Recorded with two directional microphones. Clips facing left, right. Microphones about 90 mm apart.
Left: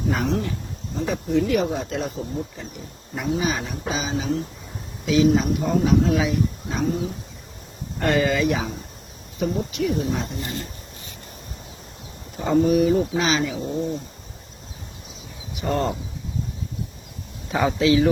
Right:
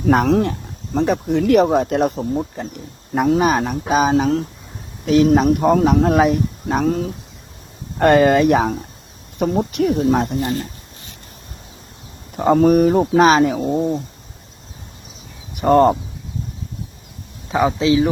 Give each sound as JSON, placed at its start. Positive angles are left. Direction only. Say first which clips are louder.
{"t": 0.1, "sound": "speech", "louder": "right 11 dB", "side_deg": -60}
{"t": 12.4, "sound": "speech", "louder": "right 6 dB", "side_deg": -55}
{"t": 15.5, "sound": "speech", "louder": "right 11 dB", "side_deg": -50}
{"t": 17.6, "sound": "speech", "louder": "right 3 dB", "side_deg": -25}